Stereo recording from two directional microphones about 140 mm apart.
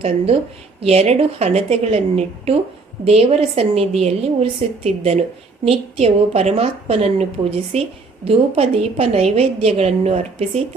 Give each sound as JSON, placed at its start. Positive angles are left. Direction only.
{"t": 0.8, "sound": "a woman's voice", "side_deg": -45}